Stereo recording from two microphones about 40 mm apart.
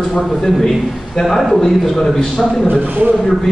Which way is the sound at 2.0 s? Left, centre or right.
Centre.